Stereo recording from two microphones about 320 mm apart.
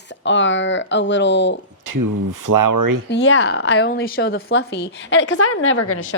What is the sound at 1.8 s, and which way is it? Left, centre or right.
Speech, right.